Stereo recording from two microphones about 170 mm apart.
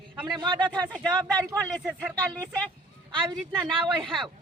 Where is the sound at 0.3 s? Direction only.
25° right (ahead or behind).